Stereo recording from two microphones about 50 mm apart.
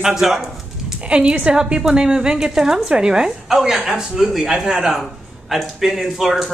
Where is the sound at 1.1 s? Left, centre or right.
Right.